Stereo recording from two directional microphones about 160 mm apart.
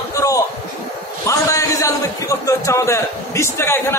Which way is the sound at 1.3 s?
20° left (ahead or behind).